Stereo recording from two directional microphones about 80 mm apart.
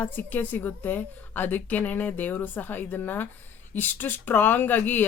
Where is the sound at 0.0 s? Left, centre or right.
Left.